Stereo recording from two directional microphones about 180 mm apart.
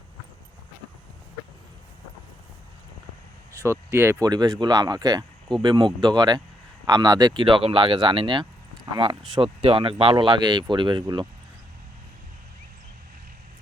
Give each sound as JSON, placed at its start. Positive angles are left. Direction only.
{"t": 3.7, "sound": "speech", "side_deg": -15}